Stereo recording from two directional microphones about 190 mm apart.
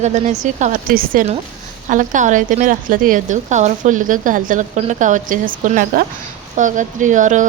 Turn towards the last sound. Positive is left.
turn(degrees=-40)  # may be behind; listen again after turning